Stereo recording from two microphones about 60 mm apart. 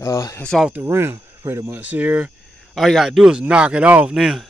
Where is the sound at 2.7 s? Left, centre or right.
Centre; by 4.0 s right.